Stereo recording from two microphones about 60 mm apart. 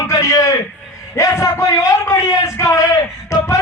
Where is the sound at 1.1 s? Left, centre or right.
Left.